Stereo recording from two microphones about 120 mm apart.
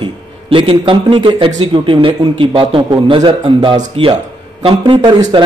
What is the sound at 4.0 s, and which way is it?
Speech, 50° right (ahead or behind).